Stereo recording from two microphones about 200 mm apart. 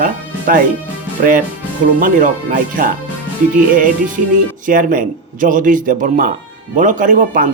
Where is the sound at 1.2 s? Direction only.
40° right (ahead or behind).